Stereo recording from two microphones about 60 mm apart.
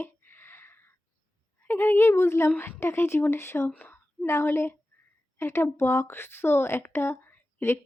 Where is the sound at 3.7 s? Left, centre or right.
Left.